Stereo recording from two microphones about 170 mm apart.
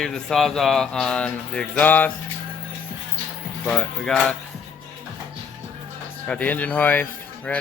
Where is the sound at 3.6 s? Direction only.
5° left (ahead or behind).